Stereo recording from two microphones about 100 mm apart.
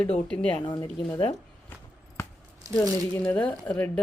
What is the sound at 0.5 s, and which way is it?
Speech, 55° left (ahead or behind).